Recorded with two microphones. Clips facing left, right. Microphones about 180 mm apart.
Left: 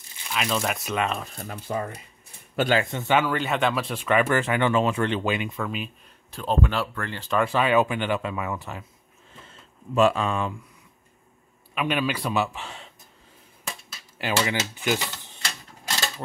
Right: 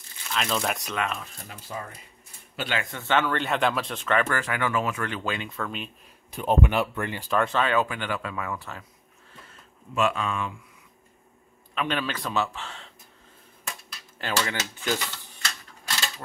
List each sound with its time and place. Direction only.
0.3 s speech: 5° left (ahead or behind)
0.9 s speech: 25° left (ahead or behind)
1.5 s speech: 55° left (ahead or behind)
2.5 s a man's voice: 45° left (ahead or behind)
2.8 s speech: 20° left (ahead or behind)
4.4 s speech: 25° left (ahead or behind); by 5.9 s 5° left (ahead or behind)
6.3 s speech: 15° right (ahead or behind)
7.2 s speech: 5° left (ahead or behind)
9.4 s a sound: 30° left (ahead or behind)
11.7 s speech: 10° left (ahead or behind)
13.9 s dishes: 10° left (ahead or behind)
14.4 s speech: 15° left (ahead or behind)